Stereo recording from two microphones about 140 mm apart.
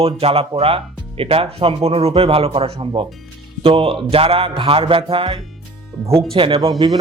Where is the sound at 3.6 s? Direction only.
40° right (ahead or behind).